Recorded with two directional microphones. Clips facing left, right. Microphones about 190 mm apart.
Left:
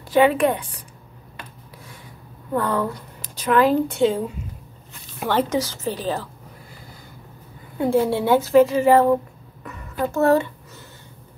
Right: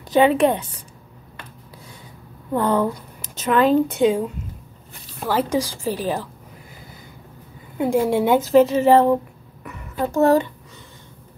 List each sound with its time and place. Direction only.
0.1 s a woman's voice: 25° right (ahead or behind)
2.5 s a woman's voice: 20° right (ahead or behind)
5.5 s a woman's voice: 10° right (ahead or behind)
7.7 s a woman's voice: 15° right (ahead or behind)
9.6 s a sound: 15° right (ahead or behind)